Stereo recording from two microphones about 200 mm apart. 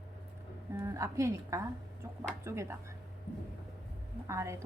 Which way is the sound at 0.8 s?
15° right (ahead or behind).